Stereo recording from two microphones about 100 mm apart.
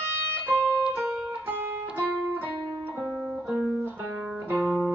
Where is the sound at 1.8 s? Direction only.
15° right (ahead or behind).